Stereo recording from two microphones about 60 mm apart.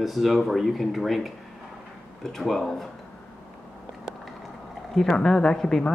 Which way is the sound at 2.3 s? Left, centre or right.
Centre.